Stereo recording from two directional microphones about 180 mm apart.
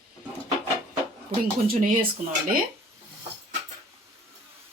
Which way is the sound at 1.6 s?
55° right (ahead or behind).